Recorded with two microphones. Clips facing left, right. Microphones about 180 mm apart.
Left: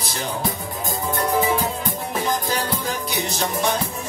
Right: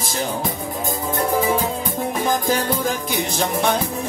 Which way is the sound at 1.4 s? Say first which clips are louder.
Right 1 dB; 50° right (ahead or behind).